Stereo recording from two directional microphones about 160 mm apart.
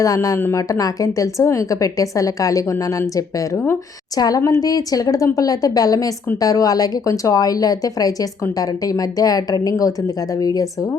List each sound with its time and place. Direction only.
0.0 s a woman's voice: 20° left (ahead or behind)